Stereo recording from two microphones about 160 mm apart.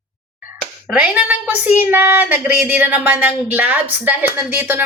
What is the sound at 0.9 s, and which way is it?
Speech, 10° right (ahead or behind).